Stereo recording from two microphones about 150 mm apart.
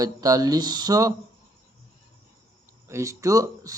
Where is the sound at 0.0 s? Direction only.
25° right (ahead or behind).